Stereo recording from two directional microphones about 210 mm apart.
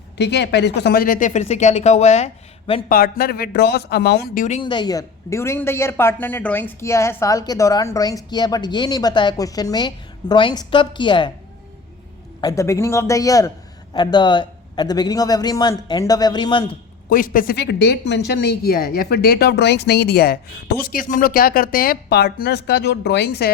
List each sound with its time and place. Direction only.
0.2 s speech: 55° left (ahead or behind); by 2.8 s 30° left (ahead or behind)
2.9 s speech: 45° left (ahead or behind)
4.4 s speech: 25° left (ahead or behind)
12.4 s a man's voice: 15° left (ahead or behind)
17.1 s speech: 45° left (ahead or behind)